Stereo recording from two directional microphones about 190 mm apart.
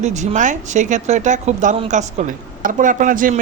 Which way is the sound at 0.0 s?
40° right (ahead or behind).